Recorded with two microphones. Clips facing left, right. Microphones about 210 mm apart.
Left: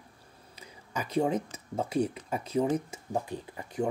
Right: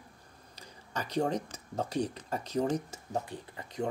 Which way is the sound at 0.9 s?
5° left (ahead or behind).